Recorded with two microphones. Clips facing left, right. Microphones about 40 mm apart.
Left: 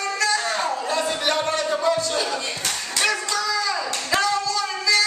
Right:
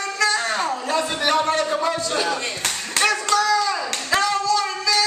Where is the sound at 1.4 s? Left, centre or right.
Right.